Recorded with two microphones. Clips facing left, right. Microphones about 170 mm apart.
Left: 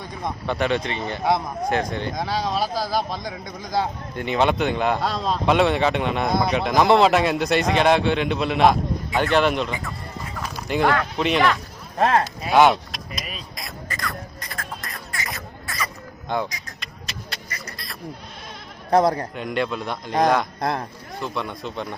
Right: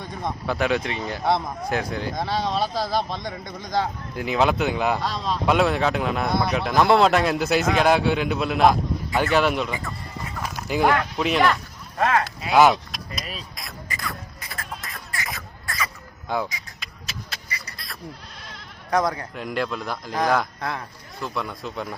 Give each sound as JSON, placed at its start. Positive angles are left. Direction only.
{"t": 0.0, "sound": "speech", "side_deg": 0}
{"t": 11.9, "sound": "speech", "side_deg": 35}
{"t": 12.9, "sound": "speech", "side_deg": 0}
{"t": 14.0, "sound": "music", "side_deg": -5}
{"t": 16.3, "sound": "speech", "side_deg": -5}
{"t": 16.8, "sound": "a sound", "side_deg": 0}
{"t": 18.9, "sound": "speech", "side_deg": 30}
{"t": 19.4, "sound": "speech", "side_deg": 0}
{"t": 20.6, "sound": "speech", "side_deg": 35}
{"t": 21.2, "sound": "speech", "side_deg": 0}